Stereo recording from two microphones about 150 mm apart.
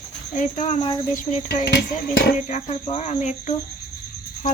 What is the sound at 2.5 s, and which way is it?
Speech, 50° left (ahead or behind).